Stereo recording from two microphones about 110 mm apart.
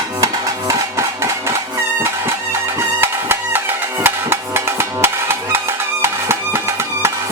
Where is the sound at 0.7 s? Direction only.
25° right (ahead or behind).